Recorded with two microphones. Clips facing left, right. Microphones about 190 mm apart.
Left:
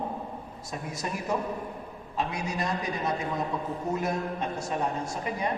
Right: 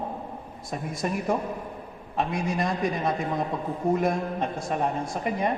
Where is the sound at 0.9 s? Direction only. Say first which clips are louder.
Right 4 dB; 50° right (ahead or behind).